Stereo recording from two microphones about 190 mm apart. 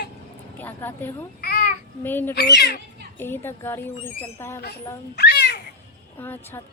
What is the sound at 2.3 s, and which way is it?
Speech, 60° left (ahead or behind).